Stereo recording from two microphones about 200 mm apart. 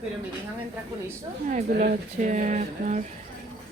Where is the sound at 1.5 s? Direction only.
40° right (ahead or behind).